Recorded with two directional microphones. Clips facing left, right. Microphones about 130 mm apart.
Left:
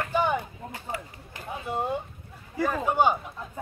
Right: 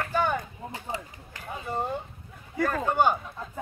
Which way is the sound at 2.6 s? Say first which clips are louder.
Even; 10° left (ahead or behind).